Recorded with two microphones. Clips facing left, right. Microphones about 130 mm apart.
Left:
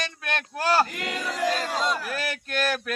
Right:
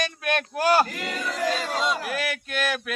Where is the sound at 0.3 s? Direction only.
20° right (ahead or behind).